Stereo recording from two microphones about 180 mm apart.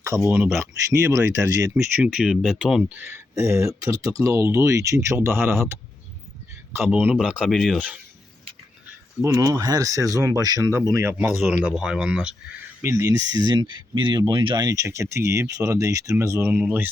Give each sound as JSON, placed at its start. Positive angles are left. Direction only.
{"t": 0.3, "sound": "speech", "side_deg": -10}
{"t": 1.7, "sound": "speech", "side_deg": -5}
{"t": 6.8, "sound": "speech", "side_deg": -10}
{"t": 9.2, "sound": "speech", "side_deg": -20}
{"t": 12.8, "sound": "speech", "side_deg": -15}